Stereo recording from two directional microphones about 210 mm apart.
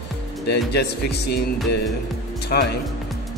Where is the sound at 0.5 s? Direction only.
50° left (ahead or behind).